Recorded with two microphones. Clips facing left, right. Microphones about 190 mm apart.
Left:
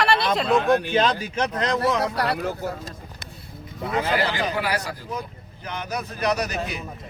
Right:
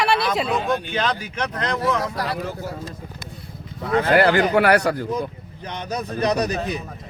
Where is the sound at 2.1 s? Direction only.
65° left (ahead or behind).